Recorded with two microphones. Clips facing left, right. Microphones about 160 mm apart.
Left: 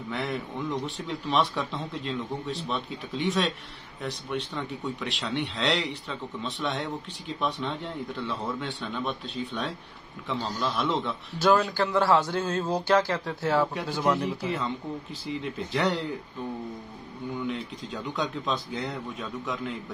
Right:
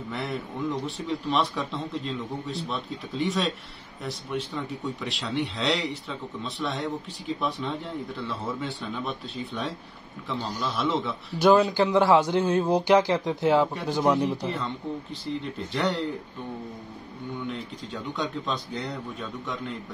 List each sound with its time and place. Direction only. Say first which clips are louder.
0.1 s speech: left 1 dB; centre (ahead or behind)
4.6 s speech: right 1 dB; centre (ahead or behind)
10.8 s speech: right 3 dB; centre (ahead or behind)
11.3 s speech: right 4 dB; 15° right (ahead or behind)
14.4 s speech: even; centre (ahead or behind)
17.4 s speech: left 2 dB; centre (ahead or behind)